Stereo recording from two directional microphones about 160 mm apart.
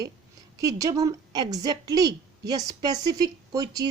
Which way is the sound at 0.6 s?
20° right (ahead or behind).